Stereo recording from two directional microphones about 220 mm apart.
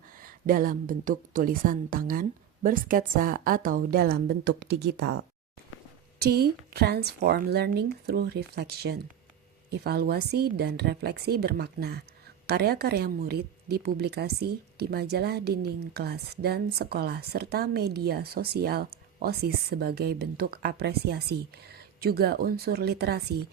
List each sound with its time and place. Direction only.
0.2 s a woman's voice: 40° right (ahead or behind)